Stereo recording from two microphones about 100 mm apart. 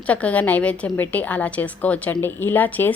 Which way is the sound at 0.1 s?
15° left (ahead or behind).